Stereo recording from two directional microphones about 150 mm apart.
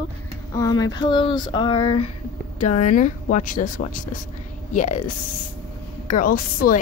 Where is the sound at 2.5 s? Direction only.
55° left (ahead or behind).